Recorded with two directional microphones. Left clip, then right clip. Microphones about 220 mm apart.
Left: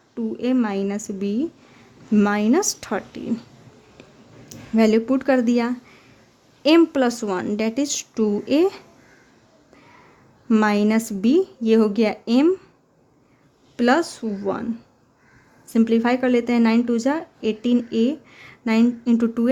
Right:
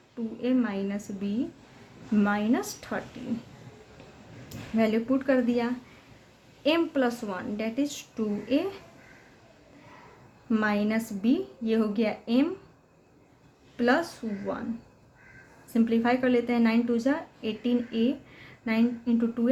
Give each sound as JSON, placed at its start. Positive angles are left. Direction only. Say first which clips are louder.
{"t": 0.4, "sound": "speech", "louder": "left 6 dB", "side_deg": 50}
{"t": 4.4, "sound": "speech", "louder": "left 8 dB", "side_deg": 50}
{"t": 10.5, "sound": "speech", "louder": "left 8 dB", "side_deg": 50}
{"t": 13.7, "sound": "speech", "louder": "left 6 dB", "side_deg": 50}
{"t": 15.7, "sound": "speech", "louder": "left 6 dB", "side_deg": 45}